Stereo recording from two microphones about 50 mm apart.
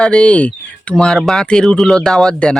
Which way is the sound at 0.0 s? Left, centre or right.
Centre.